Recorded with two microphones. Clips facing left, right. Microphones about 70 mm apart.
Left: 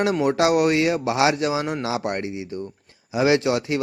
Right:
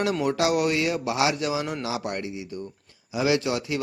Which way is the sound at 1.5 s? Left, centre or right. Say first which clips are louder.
Left 4 dB; left.